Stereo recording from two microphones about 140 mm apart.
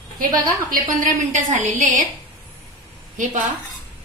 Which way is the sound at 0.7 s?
80° right.